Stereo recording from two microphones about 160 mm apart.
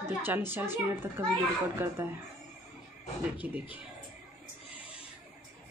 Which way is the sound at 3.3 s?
10° right (ahead or behind).